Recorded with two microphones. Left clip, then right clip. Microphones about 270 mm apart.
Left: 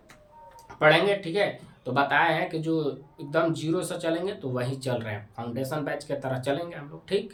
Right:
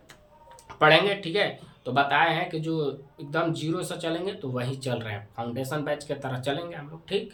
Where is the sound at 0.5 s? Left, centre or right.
Centre.